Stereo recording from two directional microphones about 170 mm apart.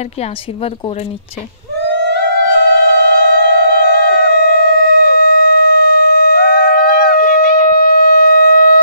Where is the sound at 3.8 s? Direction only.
70° left (ahead or behind).